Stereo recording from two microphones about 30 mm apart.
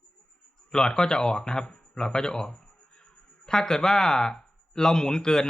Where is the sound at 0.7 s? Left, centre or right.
Left.